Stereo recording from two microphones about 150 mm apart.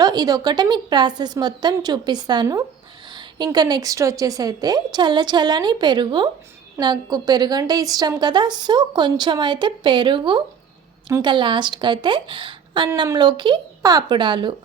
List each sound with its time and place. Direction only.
0.0 s a woman's voice: 25° right (ahead or behind)